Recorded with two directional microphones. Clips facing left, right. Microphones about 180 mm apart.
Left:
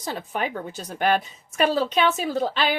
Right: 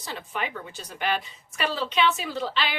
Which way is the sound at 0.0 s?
40° left (ahead or behind).